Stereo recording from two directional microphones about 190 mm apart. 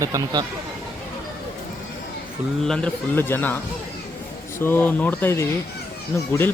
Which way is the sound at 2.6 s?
5° left (ahead or behind).